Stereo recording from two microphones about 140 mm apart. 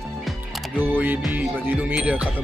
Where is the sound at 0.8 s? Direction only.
15° right (ahead or behind).